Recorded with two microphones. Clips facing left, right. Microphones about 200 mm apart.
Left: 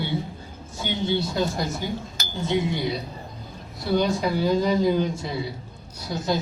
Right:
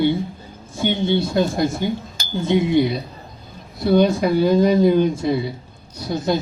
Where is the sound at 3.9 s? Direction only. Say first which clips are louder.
Right 7 dB; 55° right (ahead or behind).